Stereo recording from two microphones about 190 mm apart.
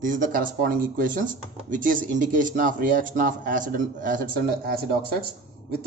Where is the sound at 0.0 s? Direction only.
45° right (ahead or behind).